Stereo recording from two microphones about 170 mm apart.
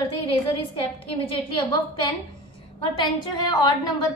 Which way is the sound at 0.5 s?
30° left (ahead or behind).